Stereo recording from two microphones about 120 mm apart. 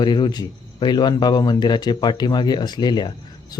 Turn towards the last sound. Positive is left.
turn(degrees=40)  # may be behind; listen again after turning